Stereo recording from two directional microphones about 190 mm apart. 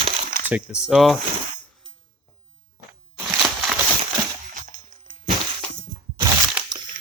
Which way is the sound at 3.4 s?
Centre (ahead or behind).